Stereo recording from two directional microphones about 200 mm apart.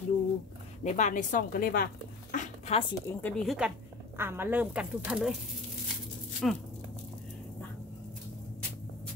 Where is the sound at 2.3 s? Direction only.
35° left (ahead or behind).